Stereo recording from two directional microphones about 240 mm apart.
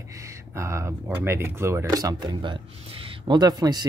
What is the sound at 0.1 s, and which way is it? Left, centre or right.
Speech, centre.